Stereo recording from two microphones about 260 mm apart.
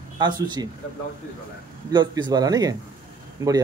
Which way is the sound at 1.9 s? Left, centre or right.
Centre.